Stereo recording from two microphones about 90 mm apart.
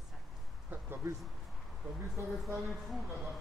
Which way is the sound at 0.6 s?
20° right (ahead or behind).